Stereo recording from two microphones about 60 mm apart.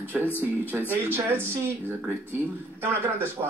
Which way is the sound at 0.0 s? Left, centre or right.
Left.